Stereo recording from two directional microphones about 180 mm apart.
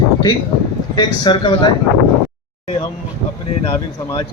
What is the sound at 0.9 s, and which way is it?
Speech, 25° left (ahead or behind).